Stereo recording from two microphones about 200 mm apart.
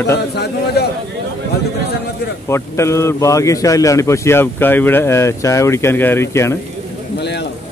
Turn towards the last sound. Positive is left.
turn(degrees=55)  # may be behind; listen again after turning